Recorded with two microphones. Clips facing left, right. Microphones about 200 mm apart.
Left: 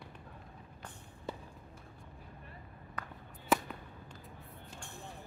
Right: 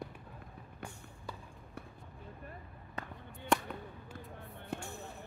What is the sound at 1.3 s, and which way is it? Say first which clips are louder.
Clip-clop: left 5 dB; 25° left (ahead or behind).